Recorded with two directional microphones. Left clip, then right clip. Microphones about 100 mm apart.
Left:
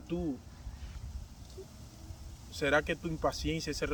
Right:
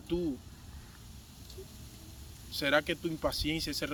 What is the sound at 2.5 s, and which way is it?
Speech, 40° left (ahead or behind).